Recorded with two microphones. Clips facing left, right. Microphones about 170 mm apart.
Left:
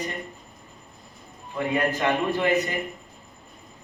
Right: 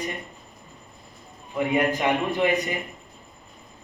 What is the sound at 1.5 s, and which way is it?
Speech, 15° right (ahead or behind).